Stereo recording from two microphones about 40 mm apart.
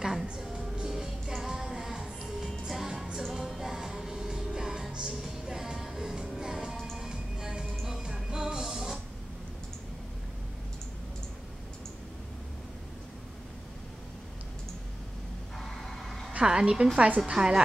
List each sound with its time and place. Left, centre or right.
0.0 s music: centre
8.6 s a sound: centre
15.5 s vehicle: centre
16.4 s a woman's voice: centre